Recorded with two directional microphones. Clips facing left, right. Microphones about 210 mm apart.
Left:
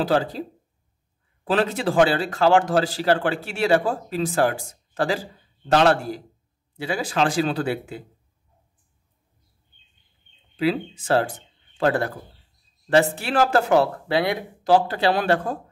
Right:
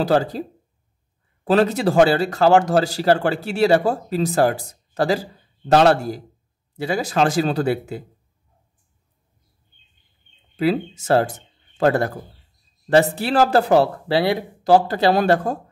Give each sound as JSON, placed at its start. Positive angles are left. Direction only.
{"t": 0.0, "sound": "speech", "side_deg": -45}
{"t": 10.5, "sound": "speech", "side_deg": -45}